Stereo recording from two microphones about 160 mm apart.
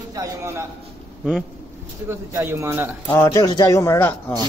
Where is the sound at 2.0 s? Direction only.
15° right (ahead or behind).